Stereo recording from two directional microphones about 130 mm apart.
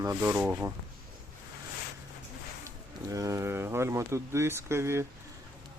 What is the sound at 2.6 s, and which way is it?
Speech, 25° right (ahead or behind).